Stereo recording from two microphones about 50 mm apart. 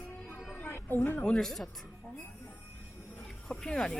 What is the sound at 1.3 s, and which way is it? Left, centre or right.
Speech, centre.